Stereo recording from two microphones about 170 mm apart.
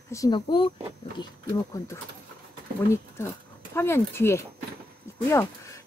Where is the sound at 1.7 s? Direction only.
15° left (ahead or behind).